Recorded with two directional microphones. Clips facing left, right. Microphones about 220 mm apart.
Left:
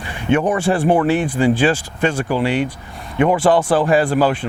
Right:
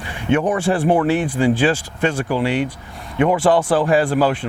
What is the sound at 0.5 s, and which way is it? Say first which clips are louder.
Speech: left 1 dB; 20° left (ahead or behind).